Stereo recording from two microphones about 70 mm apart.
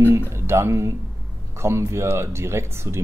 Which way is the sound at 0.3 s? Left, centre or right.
Right.